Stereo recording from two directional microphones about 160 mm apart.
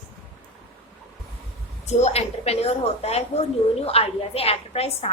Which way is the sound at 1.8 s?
45° left (ahead or behind).